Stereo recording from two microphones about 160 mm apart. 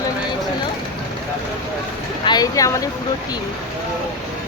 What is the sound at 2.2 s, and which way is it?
Speech, 25° left (ahead or behind).